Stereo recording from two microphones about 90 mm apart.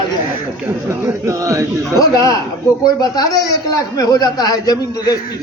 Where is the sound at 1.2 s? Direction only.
35° right (ahead or behind).